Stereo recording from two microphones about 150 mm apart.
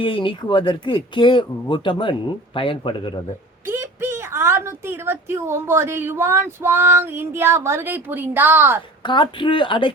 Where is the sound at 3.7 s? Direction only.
15° right (ahead or behind).